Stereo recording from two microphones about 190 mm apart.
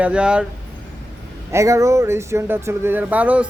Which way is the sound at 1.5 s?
15° right (ahead or behind).